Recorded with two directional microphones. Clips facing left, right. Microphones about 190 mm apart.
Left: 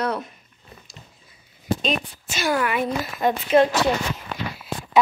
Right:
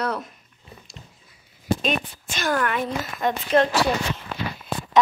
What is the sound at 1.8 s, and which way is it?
A woman's voice, 5° left (ahead or behind).